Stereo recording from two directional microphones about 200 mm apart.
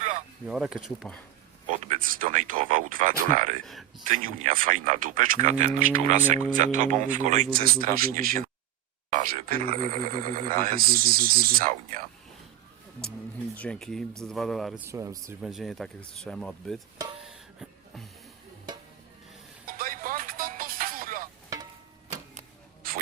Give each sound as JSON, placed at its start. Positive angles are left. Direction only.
{"t": 0.4, "sound": "speech", "side_deg": 0}
{"t": 1.6, "sound": "speech", "side_deg": -40}
{"t": 13.6, "sound": "speech", "side_deg": 5}
{"t": 14.8, "sound": "speech", "side_deg": -15}
{"t": 15.4, "sound": "speech", "side_deg": 0}
{"t": 17.2, "sound": "music", "side_deg": 0}
{"t": 19.6, "sound": "music", "side_deg": -45}
{"t": 22.4, "sound": "a sound", "side_deg": -45}